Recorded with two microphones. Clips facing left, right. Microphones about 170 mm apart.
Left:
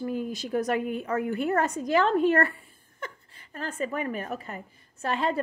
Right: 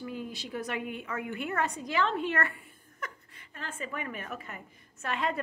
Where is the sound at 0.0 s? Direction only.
45° left (ahead or behind).